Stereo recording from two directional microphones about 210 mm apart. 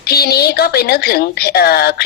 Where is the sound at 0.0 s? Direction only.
50° left (ahead or behind).